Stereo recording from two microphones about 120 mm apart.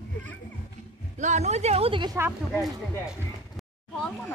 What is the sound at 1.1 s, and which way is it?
Speech, 80° right.